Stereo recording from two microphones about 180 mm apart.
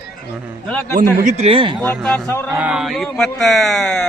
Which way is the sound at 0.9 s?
40° right (ahead or behind).